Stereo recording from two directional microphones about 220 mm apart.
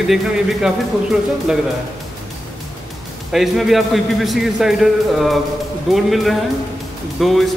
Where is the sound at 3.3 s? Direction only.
Centre (ahead or behind).